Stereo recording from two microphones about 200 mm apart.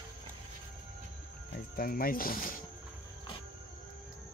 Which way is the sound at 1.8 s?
45° left (ahead or behind).